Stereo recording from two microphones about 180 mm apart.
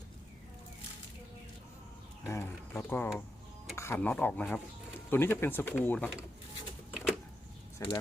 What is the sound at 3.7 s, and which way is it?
Speech, 15° left (ahead or behind).